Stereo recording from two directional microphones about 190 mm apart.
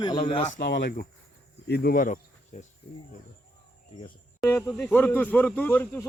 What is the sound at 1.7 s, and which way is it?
Speech, 50° left (ahead or behind).